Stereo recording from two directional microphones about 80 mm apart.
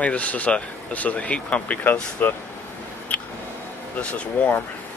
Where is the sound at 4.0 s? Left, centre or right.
Centre.